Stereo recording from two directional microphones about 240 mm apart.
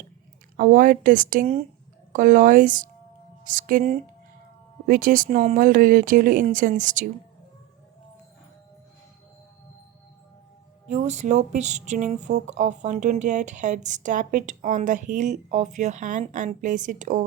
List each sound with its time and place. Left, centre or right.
0.5 s speech: right
10.8 s speech: right